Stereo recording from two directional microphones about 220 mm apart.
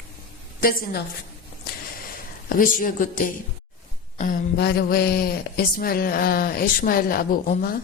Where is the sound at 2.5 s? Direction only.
40° left (ahead or behind).